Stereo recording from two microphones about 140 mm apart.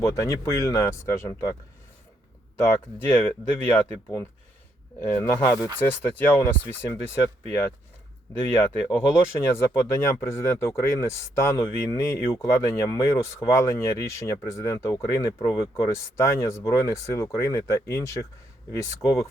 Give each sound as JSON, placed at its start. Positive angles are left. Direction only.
{"t": 0.0, "sound": "speech", "side_deg": 20}
{"t": 3.1, "sound": "speech", "side_deg": 15}